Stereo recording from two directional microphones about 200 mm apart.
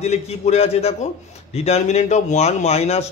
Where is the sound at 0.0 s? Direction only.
30° left (ahead or behind).